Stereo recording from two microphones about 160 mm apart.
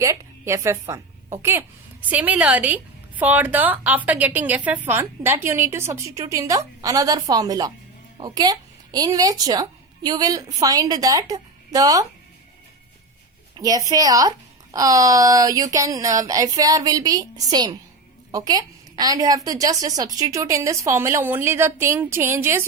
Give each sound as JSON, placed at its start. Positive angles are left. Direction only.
{"t": 0.0, "sound": "a woman's voice", "side_deg": -20}
{"t": 13.6, "sound": "a woman's voice", "side_deg": -20}